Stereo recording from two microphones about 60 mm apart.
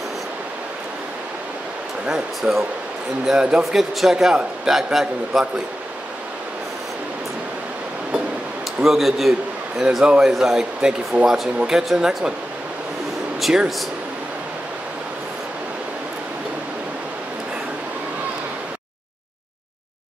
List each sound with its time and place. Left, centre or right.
2.0 s a man's voice: centre
8.8 s a man's voice: centre
10.0 s speech: centre
10.3 s a man's voice: centre
13.4 s a man's voice: centre